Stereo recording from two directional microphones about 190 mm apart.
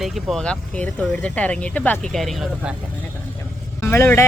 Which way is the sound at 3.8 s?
10° left (ahead or behind).